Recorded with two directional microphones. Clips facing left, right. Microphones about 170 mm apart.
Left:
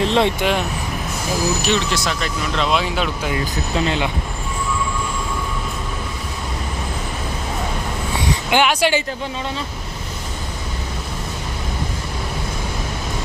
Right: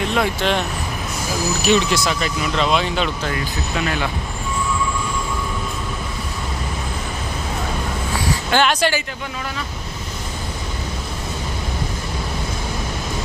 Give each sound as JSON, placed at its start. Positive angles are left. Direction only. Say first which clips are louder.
{"t": 0.0, "sound": "vehicle", "louder": "left 3 dB", "side_deg": 30}
{"t": 0.3, "sound": "speech", "louder": "left 1 dB", "side_deg": 5}
{"t": 1.6, "sound": "speech", "louder": "right 3 dB", "side_deg": -10}
{"t": 3.8, "sound": "speech", "louder": "left 3 dB", "side_deg": 20}
{"t": 8.4, "sound": "speech", "louder": "left 1 dB", "side_deg": 15}